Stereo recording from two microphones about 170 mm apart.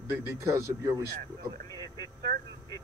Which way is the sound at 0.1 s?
15° right (ahead or behind).